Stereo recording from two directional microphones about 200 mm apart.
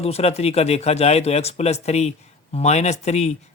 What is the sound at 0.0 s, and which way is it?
Speech, 30° left (ahead or behind).